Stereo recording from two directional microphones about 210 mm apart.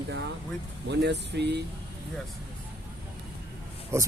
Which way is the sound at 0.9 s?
55° right (ahead or behind).